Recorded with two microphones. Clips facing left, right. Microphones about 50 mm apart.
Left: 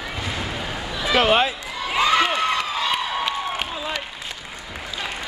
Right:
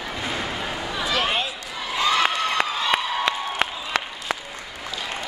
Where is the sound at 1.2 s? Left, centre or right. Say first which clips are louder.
Left 8 dB; left.